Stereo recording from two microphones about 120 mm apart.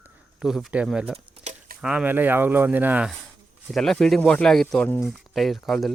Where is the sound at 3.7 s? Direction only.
5° left (ahead or behind).